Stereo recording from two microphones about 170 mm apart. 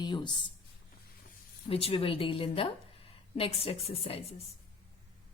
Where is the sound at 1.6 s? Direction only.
35° left (ahead or behind).